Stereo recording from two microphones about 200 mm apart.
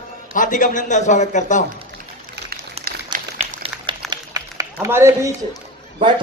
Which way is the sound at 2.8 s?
30° right (ahead or behind).